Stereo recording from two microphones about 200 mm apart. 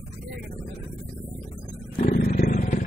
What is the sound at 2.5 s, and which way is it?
Vehicle, 40° left (ahead or behind).